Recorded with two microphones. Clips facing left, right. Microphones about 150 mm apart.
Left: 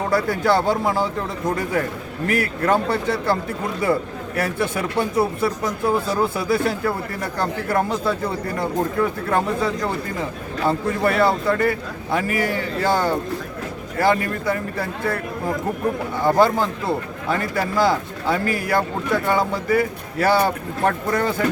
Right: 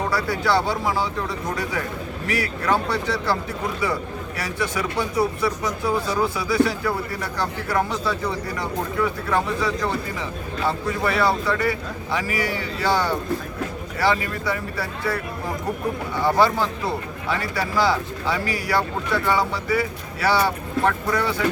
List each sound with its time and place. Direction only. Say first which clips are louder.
0.1 s speech: left 5 dB; 50° left (ahead or behind)
2.2 s speech: left 4 dB; 50° left (ahead or behind)
4.4 s speech: left 4 dB; 55° left (ahead or behind)
16.2 s speech: left 2 dB; 45° left (ahead or behind)